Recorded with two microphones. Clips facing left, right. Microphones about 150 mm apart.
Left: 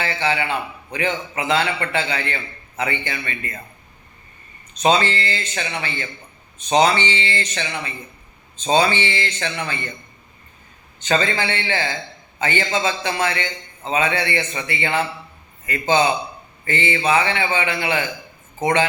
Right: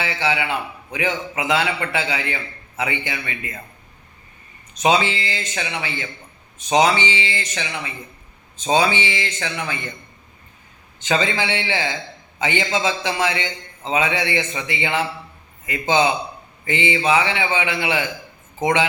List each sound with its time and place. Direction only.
0.0 s a man's voice: 10° right (ahead or behind)
4.8 s a man's voice: 10° right (ahead or behind)
11.1 s a man's voice: 15° right (ahead or behind)